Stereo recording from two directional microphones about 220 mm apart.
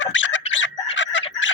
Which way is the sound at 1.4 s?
60° left (ahead or behind).